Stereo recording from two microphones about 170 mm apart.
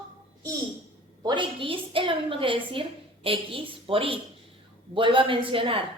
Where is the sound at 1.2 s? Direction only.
30° right (ahead or behind).